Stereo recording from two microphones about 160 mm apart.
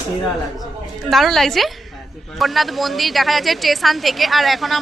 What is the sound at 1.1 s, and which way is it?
A woman's voice, centre (ahead or behind).